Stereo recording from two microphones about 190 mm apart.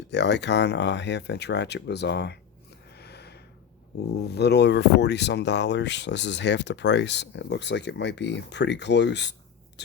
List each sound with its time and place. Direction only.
0.1 s speech: 65° left (ahead or behind)